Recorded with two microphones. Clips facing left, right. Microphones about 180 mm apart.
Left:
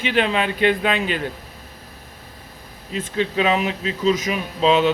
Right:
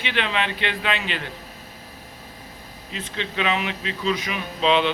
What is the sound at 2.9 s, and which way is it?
Speech, 40° left (ahead or behind).